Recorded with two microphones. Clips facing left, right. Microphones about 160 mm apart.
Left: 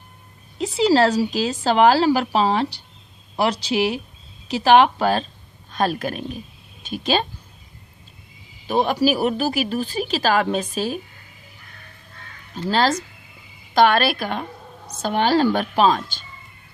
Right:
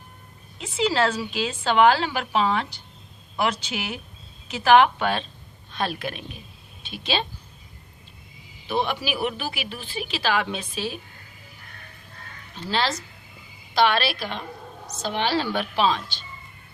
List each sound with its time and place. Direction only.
0.6 s a woman's voice: 35° left (ahead or behind)
8.6 s speech: 40° left (ahead or behind)
12.6 s a woman's voice: 45° left (ahead or behind)